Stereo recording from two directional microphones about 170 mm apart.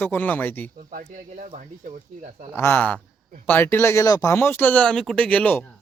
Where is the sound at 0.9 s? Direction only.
50° right (ahead or behind).